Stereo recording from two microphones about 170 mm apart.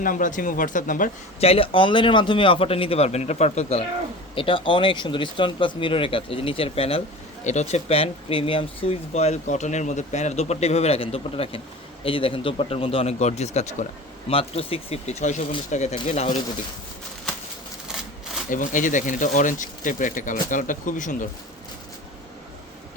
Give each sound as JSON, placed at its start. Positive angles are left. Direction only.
{"t": 0.0, "sound": "speech", "side_deg": 50}
{"t": 1.4, "sound": "speech", "side_deg": 35}
{"t": 18.5, "sound": "speech", "side_deg": 50}